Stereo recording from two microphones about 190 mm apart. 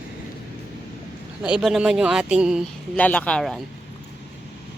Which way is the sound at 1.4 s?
5° right (ahead or behind).